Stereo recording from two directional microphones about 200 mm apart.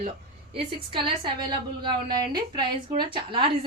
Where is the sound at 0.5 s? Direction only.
25° right (ahead or behind).